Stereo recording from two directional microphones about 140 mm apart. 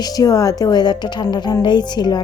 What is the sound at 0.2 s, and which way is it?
A woman's voice, 25° left (ahead or behind).